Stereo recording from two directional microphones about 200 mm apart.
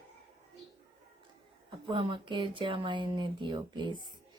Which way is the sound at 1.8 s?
25° right (ahead or behind).